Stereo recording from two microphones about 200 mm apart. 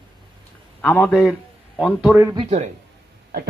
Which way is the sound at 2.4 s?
35° right (ahead or behind).